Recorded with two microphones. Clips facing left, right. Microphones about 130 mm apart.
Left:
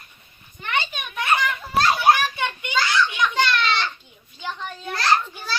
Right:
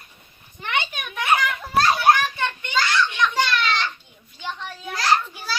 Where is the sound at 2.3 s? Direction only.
15° left (ahead or behind).